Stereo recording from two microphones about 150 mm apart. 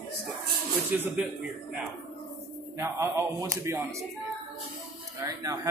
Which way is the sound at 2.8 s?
20° right (ahead or behind).